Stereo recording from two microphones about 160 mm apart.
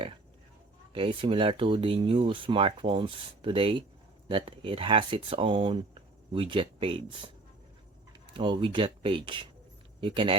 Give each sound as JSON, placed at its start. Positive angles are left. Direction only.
{"t": 0.9, "sound": "speech", "side_deg": -35}
{"t": 8.3, "sound": "speech", "side_deg": -30}